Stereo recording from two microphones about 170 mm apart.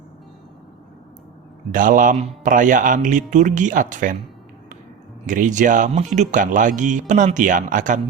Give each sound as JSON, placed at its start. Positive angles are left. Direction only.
{"t": 1.7, "sound": "a man's voice", "side_deg": -50}
{"t": 5.2, "sound": "a man's voice", "side_deg": -50}